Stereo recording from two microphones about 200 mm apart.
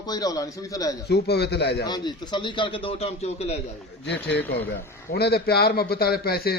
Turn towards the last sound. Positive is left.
turn(degrees=50)  # may be behind; listen again after turning